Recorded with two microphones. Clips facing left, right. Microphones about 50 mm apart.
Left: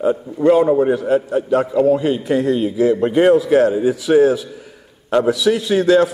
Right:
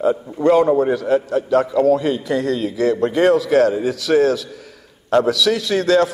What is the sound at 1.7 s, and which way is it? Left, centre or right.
A man's voice, left.